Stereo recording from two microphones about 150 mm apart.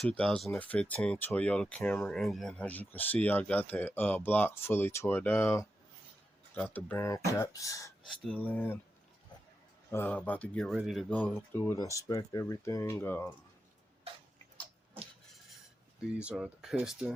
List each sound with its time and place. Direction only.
0.0 s speech: 5° left (ahead or behind); by 7.9 s 20° left (ahead or behind)
8.0 s speech: 5° left (ahead or behind)
9.9 s speech: 10° left (ahead or behind)
11.1 s speech: 10° left (ahead or behind)
16.0 s speech: 5° right (ahead or behind)